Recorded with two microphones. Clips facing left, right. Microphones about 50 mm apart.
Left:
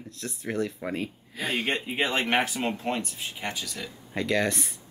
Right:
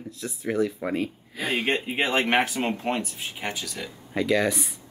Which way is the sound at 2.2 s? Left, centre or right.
Centre.